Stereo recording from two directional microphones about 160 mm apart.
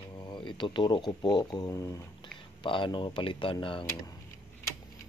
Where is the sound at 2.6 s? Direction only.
30° left (ahead or behind).